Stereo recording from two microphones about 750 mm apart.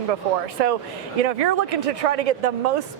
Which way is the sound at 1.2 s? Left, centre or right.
Right.